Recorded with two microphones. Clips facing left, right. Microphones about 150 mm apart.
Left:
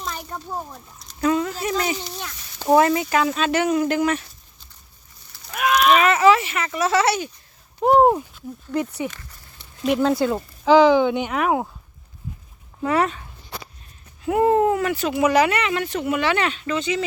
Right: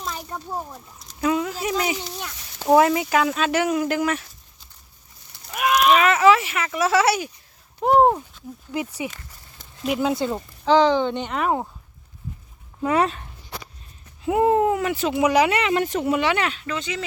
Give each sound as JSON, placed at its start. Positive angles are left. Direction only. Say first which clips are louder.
{"t": 0.0, "sound": "speech", "louder": "even", "side_deg": -5}
{"t": 5.5, "sound": "a sound", "louder": "even", "side_deg": -5}
{"t": 5.9, "sound": "speech", "louder": "left 1 dB", "side_deg": 0}
{"t": 7.8, "sound": "speech", "louder": "left 2 dB", "side_deg": 0}
{"t": 8.7, "sound": "speech", "louder": "left 3 dB", "side_deg": -10}
{"t": 10.7, "sound": "speech", "louder": "left 3 dB", "side_deg": 10}
{"t": 12.8, "sound": "speech", "louder": "even", "side_deg": -20}
{"t": 14.3, "sound": "speech", "louder": "left 1 dB", "side_deg": -15}
{"t": 15.4, "sound": "speech", "louder": "right 1 dB", "side_deg": -25}
{"t": 15.7, "sound": "speech", "louder": "right 2 dB", "side_deg": -40}
{"t": 16.1, "sound": "speech", "louder": "even", "side_deg": -15}